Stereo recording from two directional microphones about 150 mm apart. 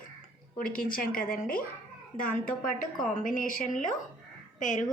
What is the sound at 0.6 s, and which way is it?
A woman's voice, 70° left (ahead or behind).